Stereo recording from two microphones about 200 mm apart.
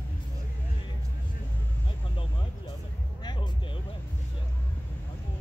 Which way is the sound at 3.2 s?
20° left (ahead or behind).